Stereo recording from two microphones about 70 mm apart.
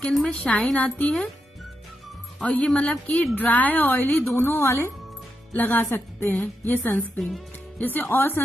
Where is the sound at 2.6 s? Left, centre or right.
Centre; by 7.0 s left.